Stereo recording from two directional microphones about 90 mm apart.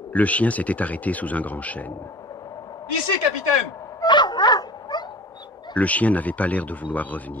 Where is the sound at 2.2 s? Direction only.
45° left (ahead or behind).